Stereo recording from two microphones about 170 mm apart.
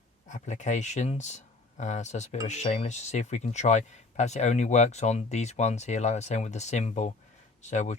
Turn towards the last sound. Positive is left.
turn(degrees=45)  # may be behind; listen again after turning